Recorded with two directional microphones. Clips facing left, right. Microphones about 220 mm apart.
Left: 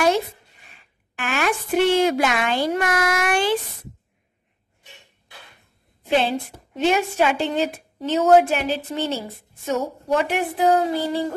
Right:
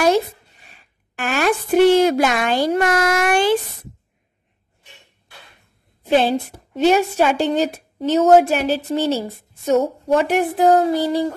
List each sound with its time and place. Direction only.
1.1 s a woman's voice: 40° right (ahead or behind)
6.0 s a woman's voice: 40° right (ahead or behind)